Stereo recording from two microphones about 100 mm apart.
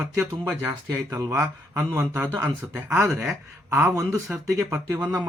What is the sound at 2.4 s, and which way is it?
Speech, 30° right (ahead or behind).